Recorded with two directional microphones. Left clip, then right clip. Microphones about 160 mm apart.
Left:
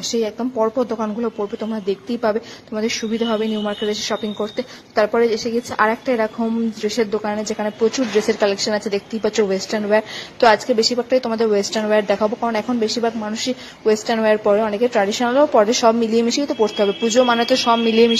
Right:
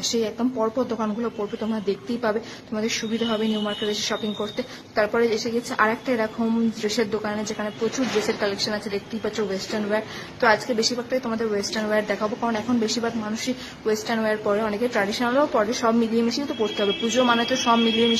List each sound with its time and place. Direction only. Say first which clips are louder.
0.0 s speech: left 3 dB; 30° left (ahead or behind)